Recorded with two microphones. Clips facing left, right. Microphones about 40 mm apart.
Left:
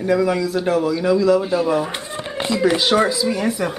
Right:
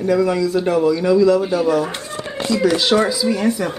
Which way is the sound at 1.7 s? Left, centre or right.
Centre.